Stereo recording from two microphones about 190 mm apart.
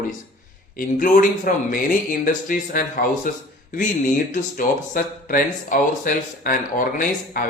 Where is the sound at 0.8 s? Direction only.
45° left (ahead or behind).